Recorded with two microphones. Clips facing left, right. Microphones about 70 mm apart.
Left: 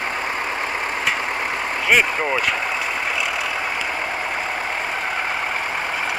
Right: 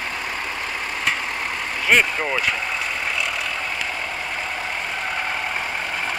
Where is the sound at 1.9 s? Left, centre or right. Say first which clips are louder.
Left 1 dB; centre.